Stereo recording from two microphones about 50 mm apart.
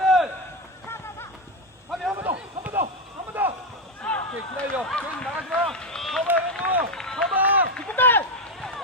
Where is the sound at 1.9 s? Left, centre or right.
Centre.